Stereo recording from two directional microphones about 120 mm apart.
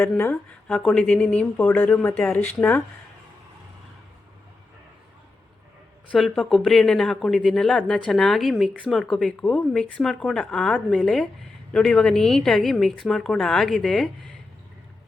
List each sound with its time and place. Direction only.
0.7 s speech: 5° left (ahead or behind)
6.1 s a woman's voice: 5° left (ahead or behind)
8.9 s a woman's voice: centre (ahead or behind)